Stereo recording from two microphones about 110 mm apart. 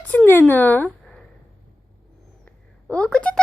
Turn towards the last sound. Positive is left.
turn(degrees=10)  # may be behind; listen again after turning